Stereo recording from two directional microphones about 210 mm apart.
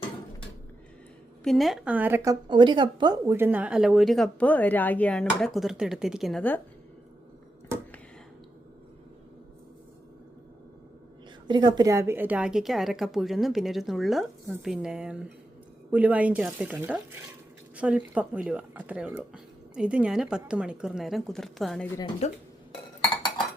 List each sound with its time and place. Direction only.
1.5 s a woman's voice: centre (ahead or behind)
11.4 s a woman's voice: 20° right (ahead or behind); by 21.8 s centre (ahead or behind)
22.2 s speech: 30° left (ahead or behind)